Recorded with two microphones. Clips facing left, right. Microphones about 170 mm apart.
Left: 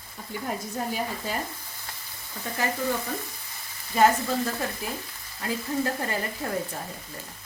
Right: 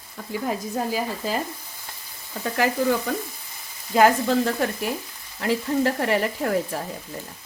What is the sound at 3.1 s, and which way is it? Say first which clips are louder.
Frying: right 6 dB; 90° right.